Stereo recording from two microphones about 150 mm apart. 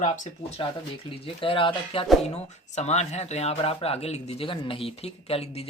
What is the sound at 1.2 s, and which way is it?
Speech, 35° left (ahead or behind).